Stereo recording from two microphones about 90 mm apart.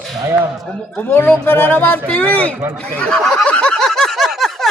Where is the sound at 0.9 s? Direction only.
20° left (ahead or behind).